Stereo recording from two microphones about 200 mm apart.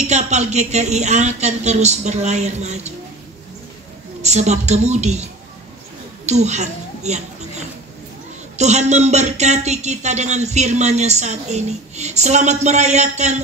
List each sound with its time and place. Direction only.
0.0 s speech: 35° right (ahead or behind)
4.2 s a child's voice: 35° right (ahead or behind)
8.5 s speech: 35° right (ahead or behind)